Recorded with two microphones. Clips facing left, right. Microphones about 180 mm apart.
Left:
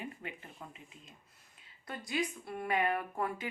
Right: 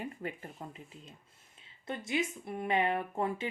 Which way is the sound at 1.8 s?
25° right (ahead or behind).